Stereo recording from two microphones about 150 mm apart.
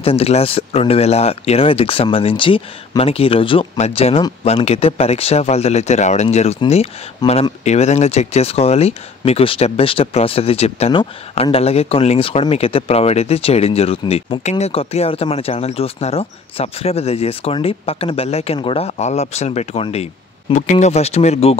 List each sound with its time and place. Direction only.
0.0 s speech: 40° left (ahead or behind)
7.2 s speech: 25° left (ahead or behind)
7.6 s speech: 50° left (ahead or behind)